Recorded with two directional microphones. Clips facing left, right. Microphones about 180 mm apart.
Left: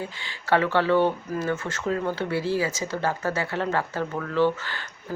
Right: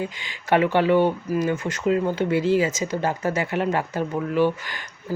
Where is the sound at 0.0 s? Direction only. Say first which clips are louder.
Right 4 dB; 15° right (ahead or behind).